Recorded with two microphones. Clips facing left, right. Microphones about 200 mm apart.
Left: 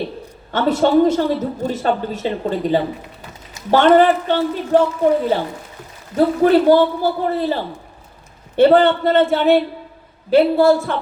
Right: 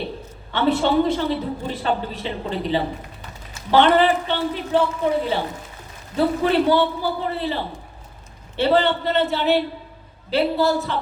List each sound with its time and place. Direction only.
0.5 s a woman's voice: 45° left (ahead or behind)